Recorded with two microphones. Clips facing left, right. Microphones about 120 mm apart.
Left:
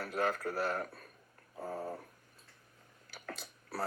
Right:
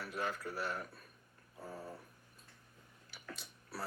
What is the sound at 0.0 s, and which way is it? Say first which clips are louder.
Speech: left 6 dB; 45° left (ahead or behind).